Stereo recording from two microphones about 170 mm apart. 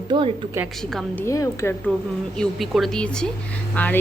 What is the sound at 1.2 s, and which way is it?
Speech, 15° left (ahead or behind).